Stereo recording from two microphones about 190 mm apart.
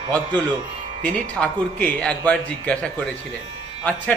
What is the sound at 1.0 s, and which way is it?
Speech, 45° right (ahead or behind).